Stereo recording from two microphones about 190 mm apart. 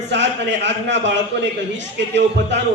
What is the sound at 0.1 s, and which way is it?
A man's voice, 70° right (ahead or behind).